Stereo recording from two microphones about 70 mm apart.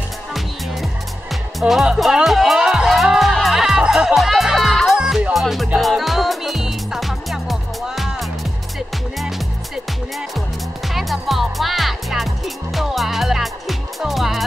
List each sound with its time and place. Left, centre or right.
1.6 s speech: centre
2.9 s music: centre
4.9 s music: centre
5.3 s music: centre
10.9 s music: centre